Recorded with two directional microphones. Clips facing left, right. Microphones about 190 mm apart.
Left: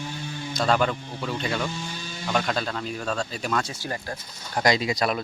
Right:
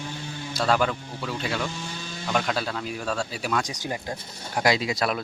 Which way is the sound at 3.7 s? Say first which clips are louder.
Right 1 dB; 20° right (ahead or behind).